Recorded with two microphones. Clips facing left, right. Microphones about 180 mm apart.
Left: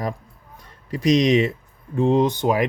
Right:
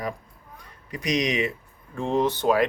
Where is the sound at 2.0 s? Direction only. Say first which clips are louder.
Left 6 dB; 15° left (ahead or behind).